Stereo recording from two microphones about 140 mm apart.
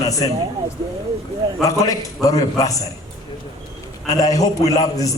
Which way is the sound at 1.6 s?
25° left (ahead or behind).